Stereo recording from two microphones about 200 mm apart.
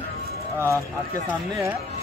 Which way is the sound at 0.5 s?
10° left (ahead or behind).